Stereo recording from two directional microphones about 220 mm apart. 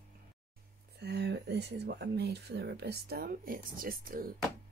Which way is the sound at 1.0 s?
50° right (ahead or behind).